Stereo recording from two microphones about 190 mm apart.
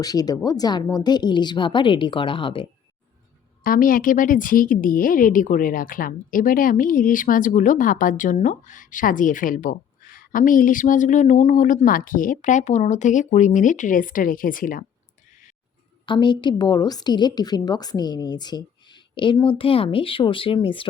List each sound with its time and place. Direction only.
0.0 s a woman's voice: 20° left (ahead or behind)
3.6 s speech: 50° left (ahead or behind)
16.0 s a woman's voice: 25° left (ahead or behind)